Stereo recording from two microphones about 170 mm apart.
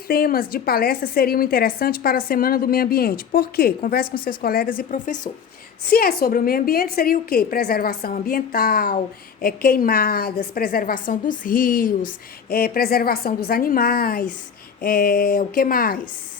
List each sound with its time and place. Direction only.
0.1 s a woman's voice: 60° left (ahead or behind)
5.8 s a woman's voice: 65° left (ahead or behind)